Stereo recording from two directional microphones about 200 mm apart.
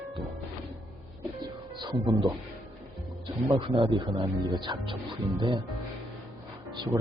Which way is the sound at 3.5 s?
25° right (ahead or behind).